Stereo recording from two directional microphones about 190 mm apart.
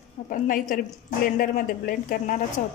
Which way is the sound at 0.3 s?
45° left (ahead or behind).